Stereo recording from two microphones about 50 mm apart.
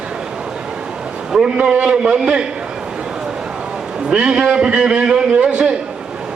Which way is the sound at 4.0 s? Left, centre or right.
Right.